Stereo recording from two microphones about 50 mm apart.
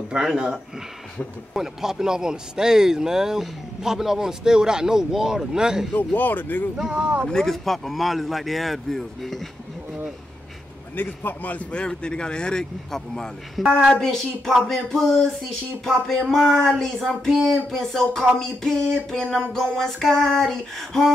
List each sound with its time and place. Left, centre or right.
0.3 s a man's voice: centre
5.9 s speech: left
7.2 s speech: centre
11.0 s speech: left
11.9 s a sound: centre
13.6 s speech: centre
14.0 s a sound: centre